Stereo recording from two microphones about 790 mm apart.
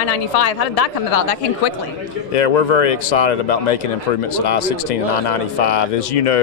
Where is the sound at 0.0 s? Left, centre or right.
Left.